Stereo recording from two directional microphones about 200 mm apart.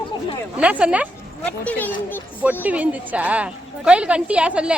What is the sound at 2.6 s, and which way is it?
A woman's voice, 10° right (ahead or behind).